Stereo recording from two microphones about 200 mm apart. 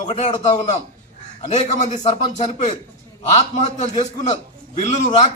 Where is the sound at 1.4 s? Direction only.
35° left (ahead or behind).